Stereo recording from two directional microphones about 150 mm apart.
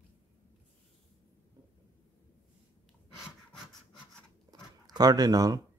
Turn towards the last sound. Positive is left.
turn(degrees=-25)  # may be behind; listen again after turning